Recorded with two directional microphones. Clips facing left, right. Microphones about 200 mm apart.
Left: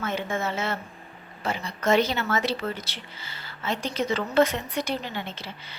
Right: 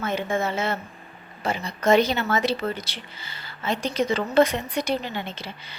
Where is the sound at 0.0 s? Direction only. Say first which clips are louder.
Right 3 dB; 15° right (ahead or behind).